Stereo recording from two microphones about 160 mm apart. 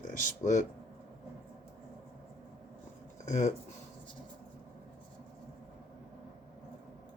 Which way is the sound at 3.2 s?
50° left (ahead or behind).